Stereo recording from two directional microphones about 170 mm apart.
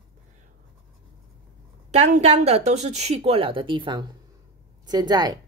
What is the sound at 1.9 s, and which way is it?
A woman's voice, 45° right (ahead or behind).